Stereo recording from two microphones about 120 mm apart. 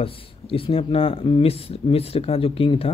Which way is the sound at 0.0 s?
50° left (ahead or behind).